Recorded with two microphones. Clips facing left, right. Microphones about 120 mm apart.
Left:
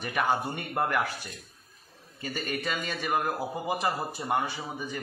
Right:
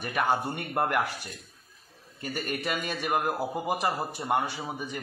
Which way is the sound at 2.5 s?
15° right (ahead or behind).